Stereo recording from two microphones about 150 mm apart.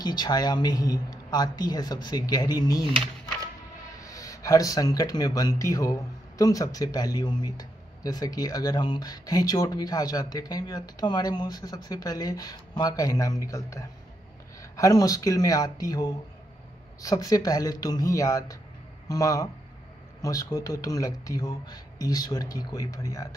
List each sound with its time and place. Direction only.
0.0 s speech: 25° left (ahead or behind)
4.0 s speech: 25° left (ahead or behind)